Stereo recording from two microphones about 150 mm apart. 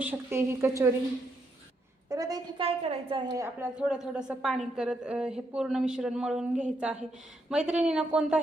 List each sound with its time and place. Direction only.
0.0 s a woman's voice: 15° right (ahead or behind)
2.0 s a woman's voice: 20° right (ahead or behind)
2.6 s a woman's voice: 40° right (ahead or behind)
3.3 s speech: 20° right (ahead or behind)
3.8 s a woman's voice: 5° right (ahead or behind)